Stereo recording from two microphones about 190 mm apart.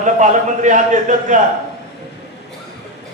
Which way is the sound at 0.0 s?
40° right (ahead or behind).